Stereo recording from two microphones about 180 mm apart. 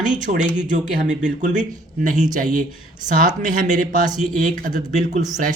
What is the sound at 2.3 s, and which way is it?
A man's voice, 45° right (ahead or behind).